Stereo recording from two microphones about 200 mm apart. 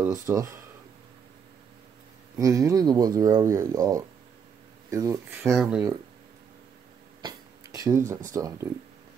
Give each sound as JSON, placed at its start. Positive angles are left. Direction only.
{"t": 0.0, "sound": "speech", "side_deg": -15}
{"t": 2.3, "sound": "speech", "side_deg": -15}
{"t": 5.6, "sound": "speech", "side_deg": -5}
{"t": 7.2, "sound": "a sound", "side_deg": -20}